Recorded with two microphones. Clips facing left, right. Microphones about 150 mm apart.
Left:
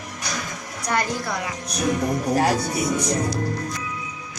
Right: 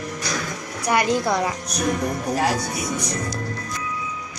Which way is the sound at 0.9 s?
15° right (ahead or behind).